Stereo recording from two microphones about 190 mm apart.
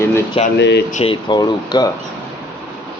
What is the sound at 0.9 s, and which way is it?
Speech, 40° left (ahead or behind).